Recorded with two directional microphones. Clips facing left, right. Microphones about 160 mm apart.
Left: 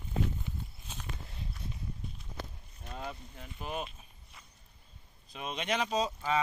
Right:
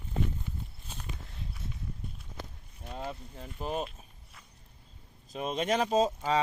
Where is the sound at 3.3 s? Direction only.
35° right (ahead or behind).